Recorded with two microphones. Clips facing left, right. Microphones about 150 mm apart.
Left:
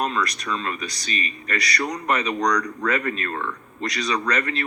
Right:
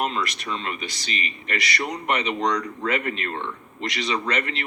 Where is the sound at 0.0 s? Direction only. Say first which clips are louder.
Left 1 dB; 25° right (ahead or behind).